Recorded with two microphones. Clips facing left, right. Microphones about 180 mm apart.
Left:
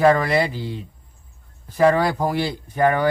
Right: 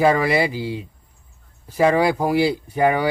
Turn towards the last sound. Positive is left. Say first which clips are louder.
# even
turn(degrees=-10)  # may be behind; listen again after turning